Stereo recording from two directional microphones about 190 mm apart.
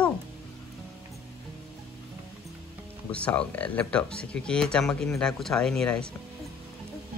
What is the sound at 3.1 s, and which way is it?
Speech, 5° left (ahead or behind).